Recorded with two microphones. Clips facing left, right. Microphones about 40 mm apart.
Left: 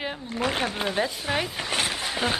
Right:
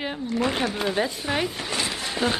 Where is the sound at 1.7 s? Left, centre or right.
Left.